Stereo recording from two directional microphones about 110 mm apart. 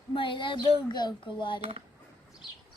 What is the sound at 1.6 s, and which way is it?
Speech, 65° right (ahead or behind).